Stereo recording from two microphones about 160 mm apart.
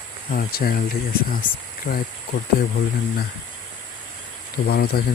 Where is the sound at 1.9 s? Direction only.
50° left (ahead or behind).